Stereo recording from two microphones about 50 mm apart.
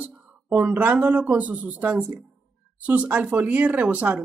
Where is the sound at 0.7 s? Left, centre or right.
Right.